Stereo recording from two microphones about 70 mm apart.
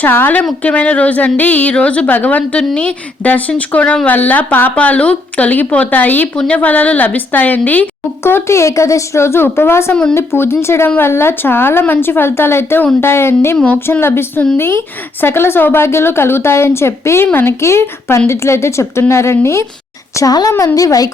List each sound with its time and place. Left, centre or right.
0.0 s speech: left
6.3 s a woman's voice: centre
6.6 s speech: left
8.2 s speech: left
9.9 s a woman's voice: centre
10.2 s speech: left
20.1 s a child's voice: left